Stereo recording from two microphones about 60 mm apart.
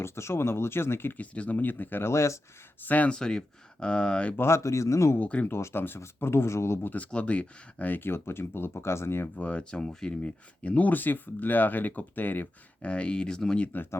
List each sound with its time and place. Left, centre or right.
0.0 s speech: left
1.1 s speech: left
2.0 s speech: left
2.8 s speech: left
3.2 s speech: centre
4.4 s speech: left
6.8 s speech: left
9.3 s speech: left
12.8 s speech: centre